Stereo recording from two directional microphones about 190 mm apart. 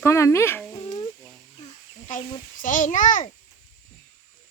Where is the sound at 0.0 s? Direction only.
15° left (ahead or behind).